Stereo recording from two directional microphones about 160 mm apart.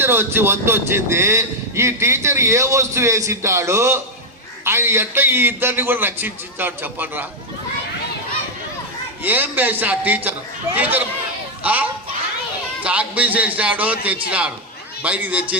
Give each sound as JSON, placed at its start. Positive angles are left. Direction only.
{"t": 0.0, "sound": "a man's voice", "side_deg": -15}
{"t": 9.2, "sound": "a man's voice", "side_deg": -10}